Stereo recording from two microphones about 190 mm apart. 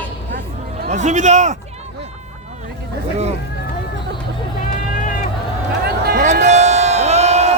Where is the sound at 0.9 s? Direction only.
40° right (ahead or behind).